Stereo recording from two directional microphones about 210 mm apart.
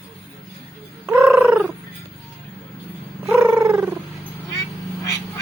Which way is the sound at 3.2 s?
5° right (ahead or behind).